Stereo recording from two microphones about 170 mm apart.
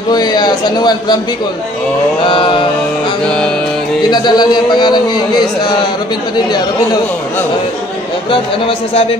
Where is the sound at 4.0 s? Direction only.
25° left (ahead or behind).